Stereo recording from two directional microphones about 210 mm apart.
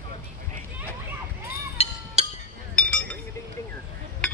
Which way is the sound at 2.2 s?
30° right (ahead or behind).